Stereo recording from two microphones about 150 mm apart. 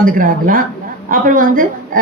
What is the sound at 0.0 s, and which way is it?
A woman's voice, 65° right (ahead or behind).